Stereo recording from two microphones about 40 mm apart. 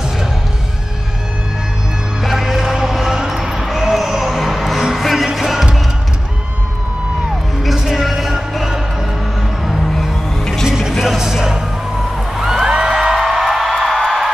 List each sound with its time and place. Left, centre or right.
2.2 s music: centre
7.6 s a sound: centre
9.7 s music: centre
12.4 s a sound: centre
12.6 s music: centre
13.7 s music: centre